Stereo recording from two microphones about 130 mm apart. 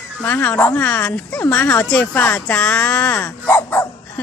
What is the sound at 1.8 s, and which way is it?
Speech, 5° left (ahead or behind).